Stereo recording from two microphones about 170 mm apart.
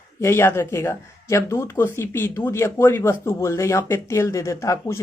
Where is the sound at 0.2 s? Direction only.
15° left (ahead or behind).